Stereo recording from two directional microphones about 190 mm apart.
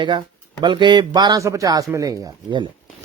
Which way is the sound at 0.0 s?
25° right (ahead or behind).